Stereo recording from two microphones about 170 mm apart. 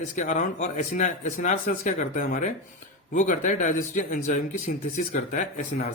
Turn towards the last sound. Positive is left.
turn(degrees=45)  # may be behind; listen again after turning